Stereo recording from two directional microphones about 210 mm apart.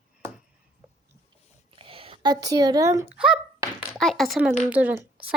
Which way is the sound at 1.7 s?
25° right (ahead or behind).